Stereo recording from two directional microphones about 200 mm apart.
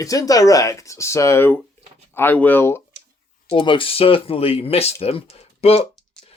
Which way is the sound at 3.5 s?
25° left (ahead or behind).